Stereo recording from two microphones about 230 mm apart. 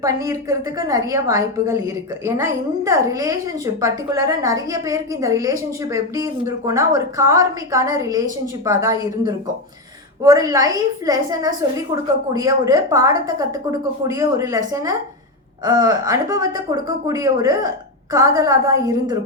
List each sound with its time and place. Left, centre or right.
0.0 s a woman's voice: centre